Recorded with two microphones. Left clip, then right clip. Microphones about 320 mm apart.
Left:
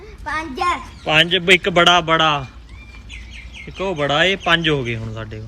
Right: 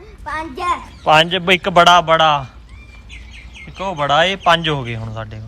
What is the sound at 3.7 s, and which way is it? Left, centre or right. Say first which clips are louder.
Speech: right 3 dB; centre.